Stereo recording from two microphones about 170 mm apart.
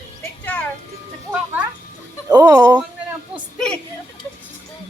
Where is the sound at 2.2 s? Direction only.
20° right (ahead or behind).